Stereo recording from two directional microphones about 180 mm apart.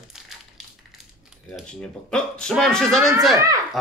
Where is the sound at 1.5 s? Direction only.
5° left (ahead or behind).